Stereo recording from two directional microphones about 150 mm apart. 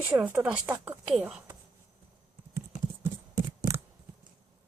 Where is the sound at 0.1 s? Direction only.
10° right (ahead or behind).